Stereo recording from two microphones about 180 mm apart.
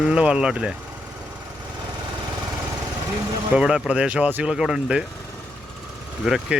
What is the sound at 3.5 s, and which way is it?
Speech, 5° right (ahead or behind).